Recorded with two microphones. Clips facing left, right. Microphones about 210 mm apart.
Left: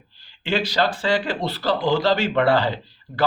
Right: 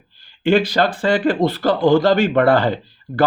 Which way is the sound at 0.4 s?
50° right (ahead or behind).